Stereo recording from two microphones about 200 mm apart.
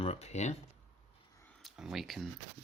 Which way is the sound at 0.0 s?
30° left (ahead or behind).